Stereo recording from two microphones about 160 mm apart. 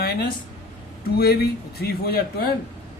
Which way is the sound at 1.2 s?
75° left (ahead or behind).